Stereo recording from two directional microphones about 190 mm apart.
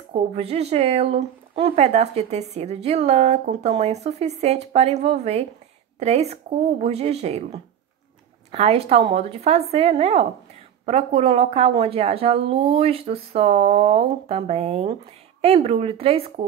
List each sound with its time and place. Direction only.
0.1 s speech: 35° right (ahead or behind)